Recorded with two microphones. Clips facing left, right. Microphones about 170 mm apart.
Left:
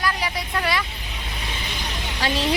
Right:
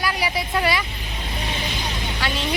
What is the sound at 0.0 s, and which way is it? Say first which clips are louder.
Vehicle: right 2 dB; 10° right (ahead or behind).